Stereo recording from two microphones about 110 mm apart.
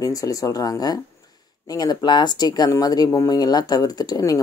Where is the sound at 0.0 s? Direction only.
30° left (ahead or behind).